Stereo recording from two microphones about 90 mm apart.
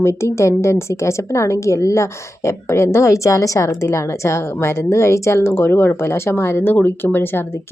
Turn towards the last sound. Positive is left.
turn(degrees=25)  # may be behind; listen again after turning